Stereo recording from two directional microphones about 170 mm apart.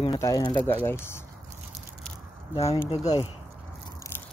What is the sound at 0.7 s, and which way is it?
Speech, 10° left (ahead or behind).